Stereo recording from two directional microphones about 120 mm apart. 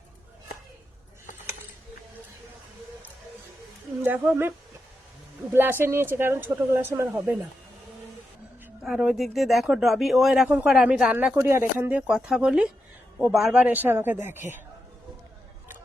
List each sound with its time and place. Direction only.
4.0 s a man's voice: 15° right (ahead or behind)
5.5 s speech: 20° right (ahead or behind)
8.8 s a man's voice: 5° right (ahead or behind)
11.3 s a man's voice: 20° right (ahead or behind)